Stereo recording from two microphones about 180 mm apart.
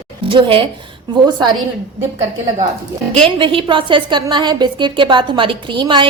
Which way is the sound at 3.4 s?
30° right (ahead or behind).